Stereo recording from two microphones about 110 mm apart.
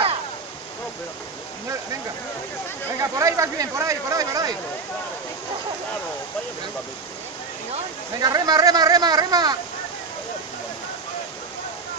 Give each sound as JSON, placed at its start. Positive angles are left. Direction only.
{"t": 3.0, "sound": "speech", "side_deg": -30}
{"t": 8.2, "sound": "speech", "side_deg": -35}